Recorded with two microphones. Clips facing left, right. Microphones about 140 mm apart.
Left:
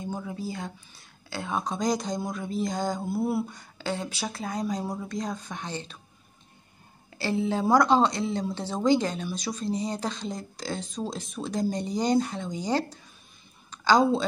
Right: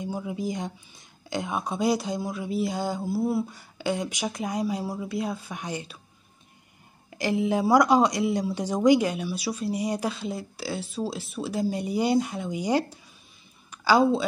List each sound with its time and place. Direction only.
0.0 s speech: 15° right (ahead or behind)
3.7 s speech: 15° right (ahead or behind)
7.1 s a woman's voice: 15° right (ahead or behind)